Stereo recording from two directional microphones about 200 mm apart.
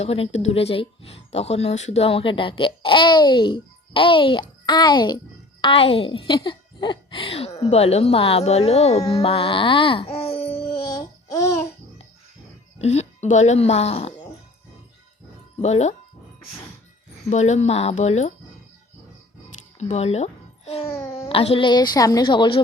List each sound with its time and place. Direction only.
0.0 s speech: 30° left (ahead or behind)
11.3 s babbling: 15° left (ahead or behind)
12.8 s music: 30° left (ahead or behind)
13.3 s speech: 35° left (ahead or behind)
15.6 s speech: 35° left (ahead or behind)
17.2 s speech: 35° left (ahead or behind)
19.9 s a child's voice: 30° left (ahead or behind)
20.9 s a child's voice: 15° left (ahead or behind)
21.2 s speech: 30° left (ahead or behind)